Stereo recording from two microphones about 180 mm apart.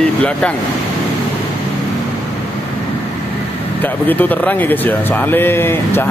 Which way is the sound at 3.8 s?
10° left (ahead or behind).